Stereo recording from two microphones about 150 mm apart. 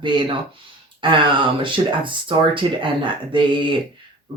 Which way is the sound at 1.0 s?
35° right (ahead or behind).